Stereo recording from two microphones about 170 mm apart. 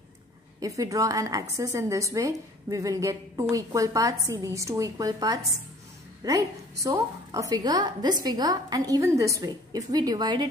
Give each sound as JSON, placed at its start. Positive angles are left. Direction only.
{"t": 0.6, "sound": "a woman's voice", "side_deg": -20}